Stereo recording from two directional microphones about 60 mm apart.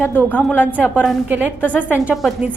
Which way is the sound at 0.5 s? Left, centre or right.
Right.